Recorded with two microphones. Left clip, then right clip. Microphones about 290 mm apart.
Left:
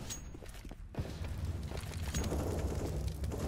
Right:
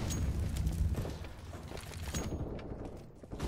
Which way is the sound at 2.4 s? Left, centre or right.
Left.